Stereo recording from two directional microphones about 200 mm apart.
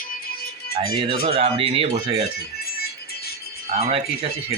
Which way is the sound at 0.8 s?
25° right (ahead or behind).